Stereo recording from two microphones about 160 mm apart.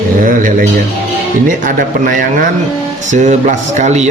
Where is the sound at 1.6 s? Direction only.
60° right (ahead or behind).